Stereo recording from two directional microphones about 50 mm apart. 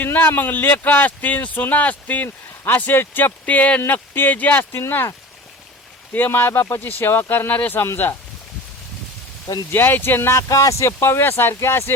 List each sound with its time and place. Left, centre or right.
0.0 s a man's voice: left
3.4 s a man's voice: left
3.8 s a man's voice: left
4.8 s speech: left
6.1 s speech: left
7.8 s speech: left
9.7 s speech: left
10.3 s speech: left